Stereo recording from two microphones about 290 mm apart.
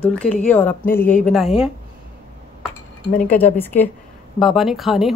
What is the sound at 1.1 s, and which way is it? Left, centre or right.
Speech, left.